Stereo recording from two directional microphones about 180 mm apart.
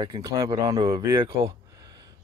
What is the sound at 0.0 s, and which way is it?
Speech, 20° right (ahead or behind).